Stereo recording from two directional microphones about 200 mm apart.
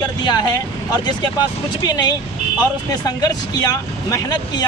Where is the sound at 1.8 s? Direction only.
20° left (ahead or behind).